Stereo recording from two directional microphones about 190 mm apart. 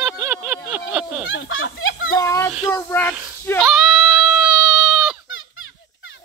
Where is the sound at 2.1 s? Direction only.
15° left (ahead or behind).